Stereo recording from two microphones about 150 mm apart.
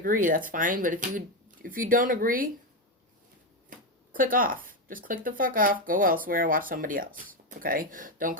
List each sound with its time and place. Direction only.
0.0 s speech: 65° right (ahead or behind)
3.7 s speech: 65° right (ahead or behind)